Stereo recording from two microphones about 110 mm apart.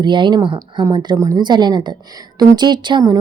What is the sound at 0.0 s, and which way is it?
Speech, 45° right (ahead or behind).